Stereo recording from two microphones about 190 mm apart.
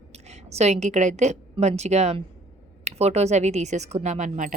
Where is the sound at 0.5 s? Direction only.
35° right (ahead or behind).